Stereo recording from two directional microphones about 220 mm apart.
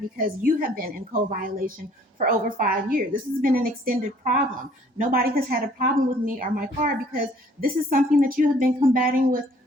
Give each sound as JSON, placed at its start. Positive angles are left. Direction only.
{"t": 0.2, "sound": "a woman's voice", "side_deg": -40}